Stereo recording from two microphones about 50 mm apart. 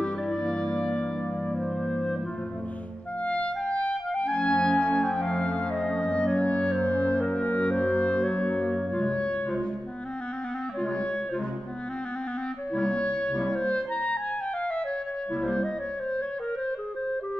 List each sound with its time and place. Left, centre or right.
0.0 s music: centre
3.3 s clarinet: left
8.9 s music: centre
12.7 s music: centre